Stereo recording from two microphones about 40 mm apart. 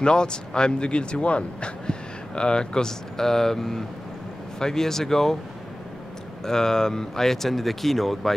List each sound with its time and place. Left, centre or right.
0.0 s a man's voice: left
6.4 s speech: centre